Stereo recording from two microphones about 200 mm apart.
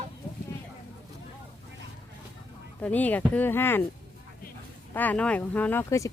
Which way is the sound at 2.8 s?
10° left (ahead or behind).